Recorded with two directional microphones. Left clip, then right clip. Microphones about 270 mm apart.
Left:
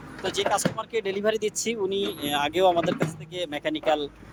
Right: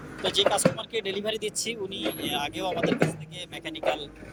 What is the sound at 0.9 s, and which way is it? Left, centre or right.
Speech, centre.